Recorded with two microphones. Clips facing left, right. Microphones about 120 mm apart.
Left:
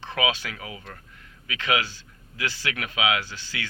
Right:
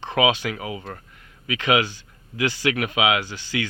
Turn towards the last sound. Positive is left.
turn(degrees=-15)  # may be behind; listen again after turning